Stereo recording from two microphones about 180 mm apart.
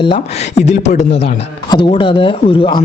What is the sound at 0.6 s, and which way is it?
Speech, 40° left (ahead or behind).